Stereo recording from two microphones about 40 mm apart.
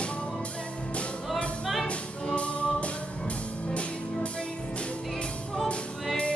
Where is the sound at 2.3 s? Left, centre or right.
Left.